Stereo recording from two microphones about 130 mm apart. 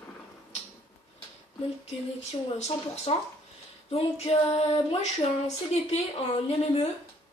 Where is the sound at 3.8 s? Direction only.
50° left (ahead or behind).